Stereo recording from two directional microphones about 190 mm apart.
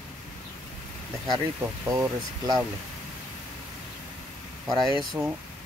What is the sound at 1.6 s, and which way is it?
Speech, 15° right (ahead or behind).